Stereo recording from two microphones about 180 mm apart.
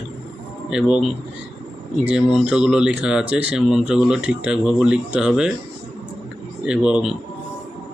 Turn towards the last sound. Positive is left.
turn(degrees=-5)  # may be behind; listen again after turning